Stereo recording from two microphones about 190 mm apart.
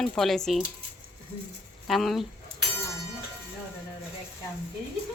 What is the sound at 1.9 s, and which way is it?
Speech, centre (ahead or behind).